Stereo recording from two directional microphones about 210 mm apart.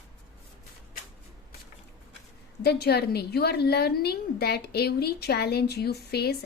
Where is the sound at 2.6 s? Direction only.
50° left (ahead or behind).